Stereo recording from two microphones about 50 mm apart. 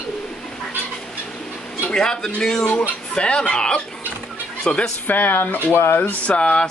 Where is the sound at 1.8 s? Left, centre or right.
Centre.